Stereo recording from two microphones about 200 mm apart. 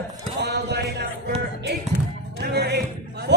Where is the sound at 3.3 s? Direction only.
60° right (ahead or behind).